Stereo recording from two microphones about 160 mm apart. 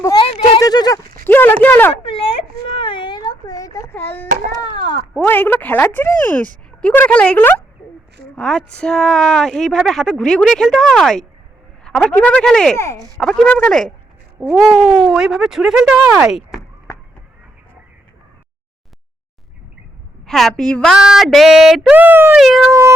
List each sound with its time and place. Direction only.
0.0 s speech: 25° left (ahead or behind)
0.3 s a sound: 30° left (ahead or behind)
1.2 s a sound: 15° left (ahead or behind)
2.0 s baby cry: 35° left (ahead or behind); by 4.3 s 15° left (ahead or behind)
4.3 s a sound: 55° right (ahead or behind)
4.7 s speech: 30° left (ahead or behind)
5.1 s speech: 10° left (ahead or behind)
12.7 s speech: 15° left (ahead or behind)
13.1 s speech: 5° left (ahead or behind)
20.2 s speech: centre (ahead or behind)
22.4 s speech: centre (ahead or behind)